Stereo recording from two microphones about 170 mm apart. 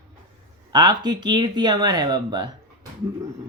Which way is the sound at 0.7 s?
25° right (ahead or behind).